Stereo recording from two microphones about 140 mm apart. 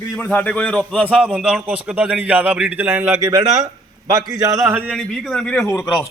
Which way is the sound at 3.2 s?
25° right (ahead or behind).